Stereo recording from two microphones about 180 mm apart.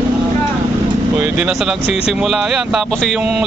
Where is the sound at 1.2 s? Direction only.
5° right (ahead or behind).